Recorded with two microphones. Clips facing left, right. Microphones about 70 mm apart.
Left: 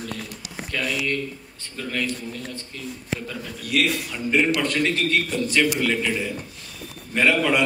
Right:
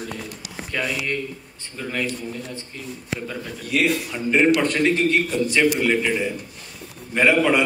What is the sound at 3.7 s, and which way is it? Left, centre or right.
A man's voice, right.